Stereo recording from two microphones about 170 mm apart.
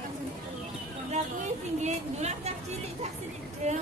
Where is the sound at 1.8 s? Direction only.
40° right (ahead or behind).